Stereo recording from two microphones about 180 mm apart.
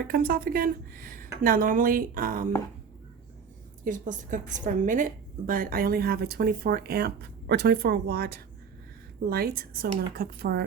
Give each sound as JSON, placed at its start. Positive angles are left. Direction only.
{"t": 0.1, "sound": "a woman's voice", "side_deg": -55}
{"t": 3.8, "sound": "a woman's voice", "side_deg": -45}